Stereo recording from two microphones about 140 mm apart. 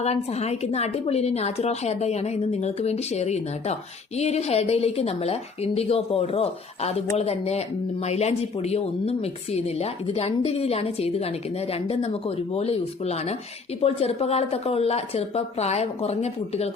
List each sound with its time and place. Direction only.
0.0 s speech: 50° left (ahead or behind)